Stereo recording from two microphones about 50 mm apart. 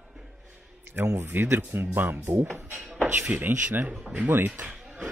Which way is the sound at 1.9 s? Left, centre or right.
Right.